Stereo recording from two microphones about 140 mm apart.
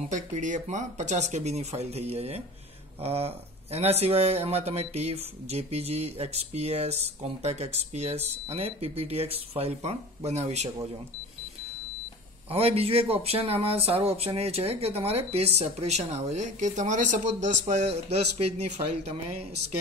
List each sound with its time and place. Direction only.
0.1 s speech: 60° right (ahead or behind)
12.4 s speech: 45° right (ahead or behind)